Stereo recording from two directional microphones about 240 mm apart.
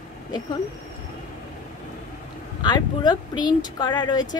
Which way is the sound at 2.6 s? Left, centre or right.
Centre.